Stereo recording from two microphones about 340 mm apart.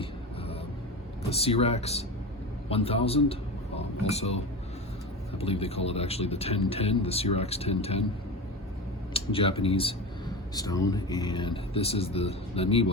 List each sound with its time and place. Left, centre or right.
0.0 s vehicle: centre
1.3 s speech: centre
5.4 s speech: centre
9.1 s speech: centre